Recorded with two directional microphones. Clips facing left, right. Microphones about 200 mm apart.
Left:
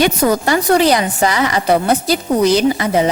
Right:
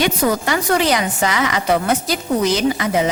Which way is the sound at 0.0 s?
40° left (ahead or behind).